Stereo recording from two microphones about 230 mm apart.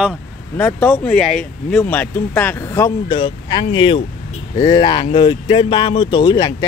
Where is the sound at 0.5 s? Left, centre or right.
Centre.